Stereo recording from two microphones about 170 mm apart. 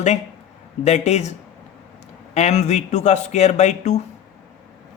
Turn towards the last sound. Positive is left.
turn(degrees=40)  # may be behind; listen again after turning